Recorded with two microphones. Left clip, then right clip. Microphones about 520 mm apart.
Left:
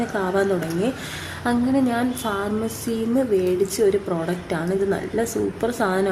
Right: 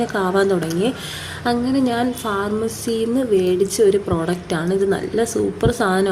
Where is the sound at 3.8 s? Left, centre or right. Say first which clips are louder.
Right 4 dB; left.